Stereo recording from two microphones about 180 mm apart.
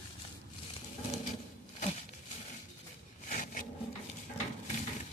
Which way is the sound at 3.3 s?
50° left (ahead or behind).